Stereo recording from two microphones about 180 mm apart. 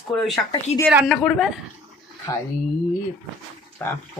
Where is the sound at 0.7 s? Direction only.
35° left (ahead or behind).